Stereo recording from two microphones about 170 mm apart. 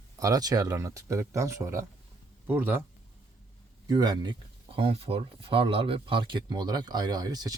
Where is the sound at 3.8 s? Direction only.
25° right (ahead or behind).